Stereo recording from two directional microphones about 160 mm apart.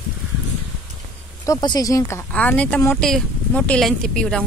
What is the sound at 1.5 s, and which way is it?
Speech, 25° left (ahead or behind).